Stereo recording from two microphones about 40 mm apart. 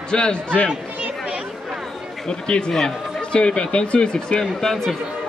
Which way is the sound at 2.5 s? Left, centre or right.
Centre.